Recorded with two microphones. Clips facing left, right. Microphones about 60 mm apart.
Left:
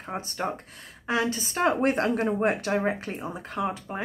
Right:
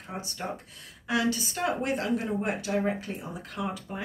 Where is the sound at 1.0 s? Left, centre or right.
Left.